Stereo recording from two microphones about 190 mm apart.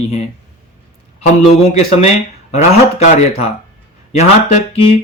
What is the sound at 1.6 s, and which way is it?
Speech, 35° left (ahead or behind).